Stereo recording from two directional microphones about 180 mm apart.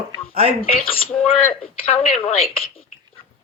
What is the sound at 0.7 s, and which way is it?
Speech, 30° left (ahead or behind).